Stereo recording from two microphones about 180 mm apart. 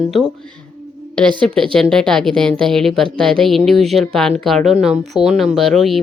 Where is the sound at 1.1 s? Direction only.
25° right (ahead or behind).